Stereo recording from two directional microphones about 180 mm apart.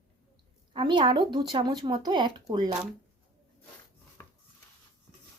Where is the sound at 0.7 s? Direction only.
25° right (ahead or behind).